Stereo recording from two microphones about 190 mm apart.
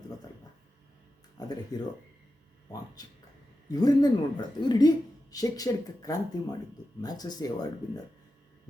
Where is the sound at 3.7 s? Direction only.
20° left (ahead or behind).